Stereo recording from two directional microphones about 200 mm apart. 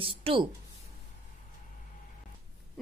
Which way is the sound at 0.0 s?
25° right (ahead or behind).